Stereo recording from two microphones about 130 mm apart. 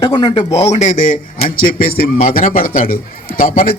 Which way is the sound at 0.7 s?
65° left (ahead or behind).